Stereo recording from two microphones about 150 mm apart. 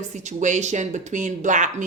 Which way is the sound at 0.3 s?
55° right (ahead or behind).